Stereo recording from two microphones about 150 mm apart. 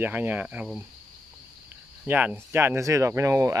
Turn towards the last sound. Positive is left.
turn(degrees=-20)  # may be behind; listen again after turning